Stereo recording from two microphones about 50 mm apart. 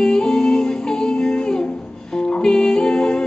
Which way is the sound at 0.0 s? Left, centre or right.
Centre.